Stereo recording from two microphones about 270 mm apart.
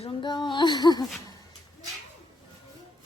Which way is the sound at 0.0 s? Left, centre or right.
Centre.